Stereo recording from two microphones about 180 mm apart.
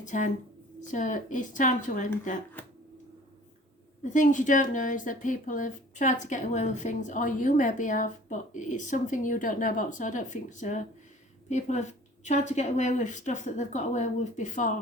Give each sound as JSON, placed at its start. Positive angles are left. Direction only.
{"t": 0.0, "sound": "speech", "side_deg": 45}
{"t": 4.1, "sound": "a woman's voice", "side_deg": 45}